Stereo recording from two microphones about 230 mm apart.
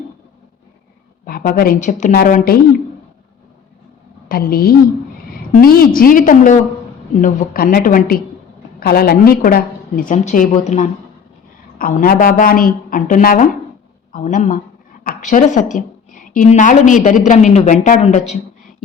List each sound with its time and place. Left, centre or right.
1.2 s a woman's voice: left
4.3 s a woman's voice: left